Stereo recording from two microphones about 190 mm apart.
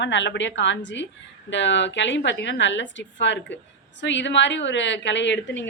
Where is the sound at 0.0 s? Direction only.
70° left (ahead or behind).